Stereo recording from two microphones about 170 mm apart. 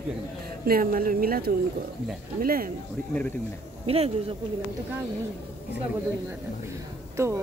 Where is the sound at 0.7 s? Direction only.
60° right (ahead or behind).